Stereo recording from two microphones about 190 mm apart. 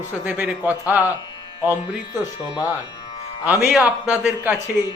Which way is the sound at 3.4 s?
5° right (ahead or behind).